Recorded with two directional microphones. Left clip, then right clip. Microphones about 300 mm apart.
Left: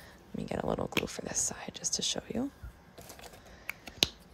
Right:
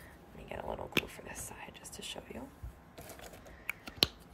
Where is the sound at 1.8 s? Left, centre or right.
Centre.